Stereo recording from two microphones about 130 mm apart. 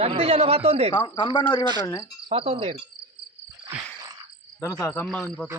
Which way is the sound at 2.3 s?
45° right (ahead or behind).